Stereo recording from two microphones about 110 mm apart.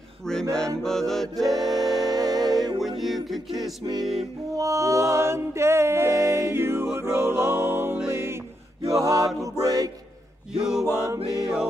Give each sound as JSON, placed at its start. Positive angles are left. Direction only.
{"t": 0.2, "sound": "music", "side_deg": 5}
{"t": 2.5, "sound": "music", "side_deg": -35}
{"t": 3.3, "sound": "music", "side_deg": 0}
{"t": 3.6, "sound": "music", "side_deg": -35}
{"t": 9.0, "sound": "music", "side_deg": -30}
{"t": 10.6, "sound": "music", "side_deg": -5}